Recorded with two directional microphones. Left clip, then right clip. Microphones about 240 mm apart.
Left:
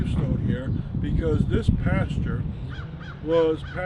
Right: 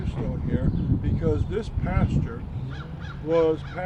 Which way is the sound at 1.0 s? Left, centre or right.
Centre.